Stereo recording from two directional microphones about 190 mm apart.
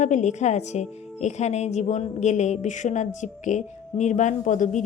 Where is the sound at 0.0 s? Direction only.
40° left (ahead or behind).